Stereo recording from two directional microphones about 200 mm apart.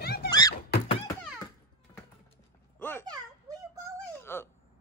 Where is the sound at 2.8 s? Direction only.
10° left (ahead or behind).